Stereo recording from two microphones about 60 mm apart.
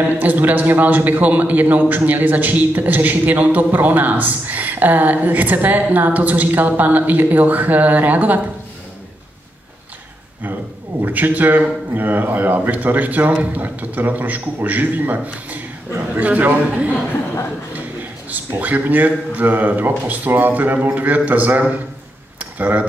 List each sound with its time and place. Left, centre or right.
0.2 s a man's voice: right
11.0 s a man's voice: right
18.3 s a man's voice: right
22.4 s tick-tock: right